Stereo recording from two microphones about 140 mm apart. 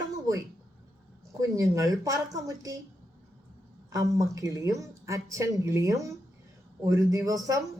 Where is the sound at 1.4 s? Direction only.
25° right (ahead or behind).